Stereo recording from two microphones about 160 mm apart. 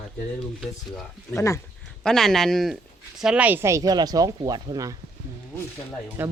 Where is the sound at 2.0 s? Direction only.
5° left (ahead or behind); by 4.9 s 25° right (ahead or behind).